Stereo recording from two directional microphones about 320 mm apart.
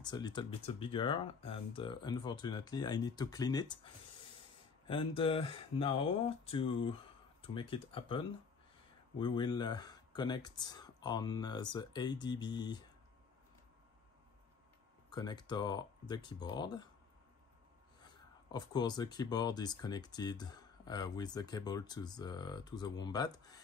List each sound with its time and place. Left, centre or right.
0.0 s speech: centre
15.0 s speech: centre
18.0 s speech: centre